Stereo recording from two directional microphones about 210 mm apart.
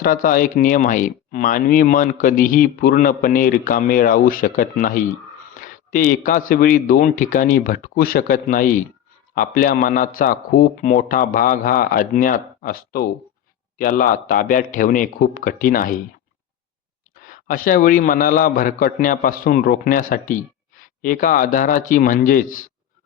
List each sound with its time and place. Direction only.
0.0 s a man's voice: 40° left (ahead or behind)
5.5 s a sound: 40° left (ahead or behind)
6.5 s a man's voice: 40° left (ahead or behind)
17.2 s a man's voice: 40° left (ahead or behind)